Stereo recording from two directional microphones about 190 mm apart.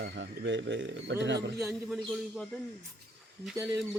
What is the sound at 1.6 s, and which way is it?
Speech, centre (ahead or behind).